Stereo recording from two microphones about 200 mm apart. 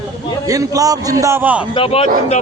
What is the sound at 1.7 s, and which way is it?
Speech, 30° left (ahead or behind).